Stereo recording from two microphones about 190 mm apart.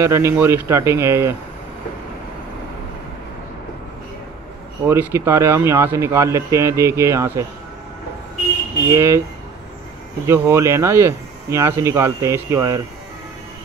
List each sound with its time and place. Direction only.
0.0 s speech: 15° right (ahead or behind)
4.8 s speech: 10° right (ahead or behind)
8.9 s speech: 15° right (ahead or behind)
10.2 s speech: 15° right (ahead or behind)